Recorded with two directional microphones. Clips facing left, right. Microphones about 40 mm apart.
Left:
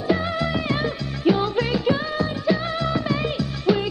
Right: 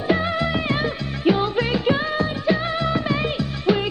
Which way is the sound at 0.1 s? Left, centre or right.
Right.